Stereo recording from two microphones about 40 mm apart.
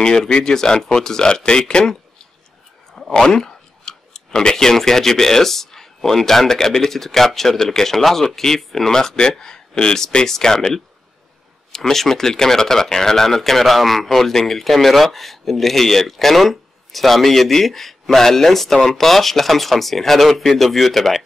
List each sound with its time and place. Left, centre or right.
0.0 s speech: centre
3.3 s speech: centre